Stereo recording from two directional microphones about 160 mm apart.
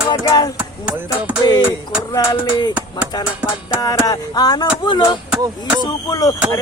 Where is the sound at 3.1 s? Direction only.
25° left (ahead or behind).